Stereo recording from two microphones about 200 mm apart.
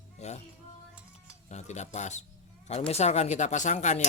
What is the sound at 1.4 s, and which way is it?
Cutlery, 35° left (ahead or behind).